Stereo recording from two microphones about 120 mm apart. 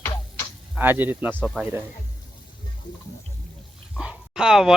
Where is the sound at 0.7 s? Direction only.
15° right (ahead or behind).